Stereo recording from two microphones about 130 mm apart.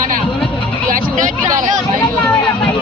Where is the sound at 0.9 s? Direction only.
80° right.